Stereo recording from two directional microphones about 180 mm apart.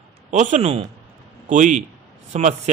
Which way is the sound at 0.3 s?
40° right (ahead or behind).